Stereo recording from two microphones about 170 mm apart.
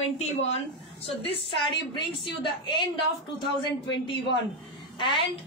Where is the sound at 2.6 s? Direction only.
25° left (ahead or behind).